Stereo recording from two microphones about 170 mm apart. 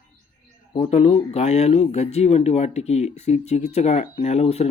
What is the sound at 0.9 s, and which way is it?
Speech, 40° left (ahead or behind).